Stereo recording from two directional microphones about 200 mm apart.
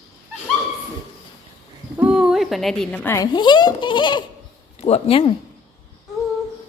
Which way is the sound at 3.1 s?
20° left (ahead or behind).